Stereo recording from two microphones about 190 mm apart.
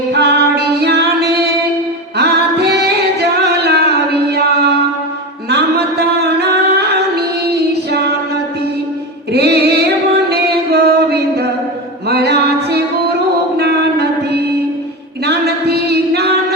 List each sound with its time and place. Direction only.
0.1 s music: 60° right (ahead or behind)
4.1 s singing: 60° right (ahead or behind)
5.5 s music: 60° right (ahead or behind)
9.3 s a sound: 60° right (ahead or behind)
10.2 s music: 55° right (ahead or behind)
15.2 s a sound: 60° right (ahead or behind)